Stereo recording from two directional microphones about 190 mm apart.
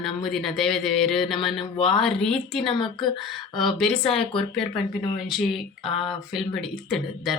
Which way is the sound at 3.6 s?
Centre (ahead or behind).